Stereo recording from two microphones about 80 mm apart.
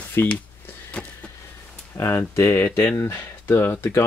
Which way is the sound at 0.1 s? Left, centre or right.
Left.